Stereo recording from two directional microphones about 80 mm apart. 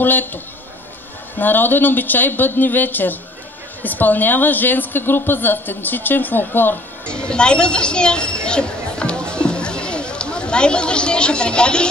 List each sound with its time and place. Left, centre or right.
0.0 s a woman's voice: left
1.4 s a woman's voice: left
7.1 s a sound: centre